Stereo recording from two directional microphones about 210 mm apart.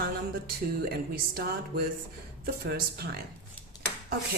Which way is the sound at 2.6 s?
50° right (ahead or behind).